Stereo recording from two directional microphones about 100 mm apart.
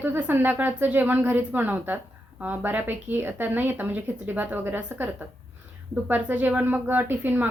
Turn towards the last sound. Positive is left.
turn(degrees=-20)  # may be behind; listen again after turning